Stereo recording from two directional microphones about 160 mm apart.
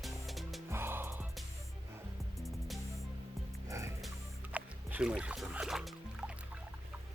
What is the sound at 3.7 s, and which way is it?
Music, 20° right (ahead or behind).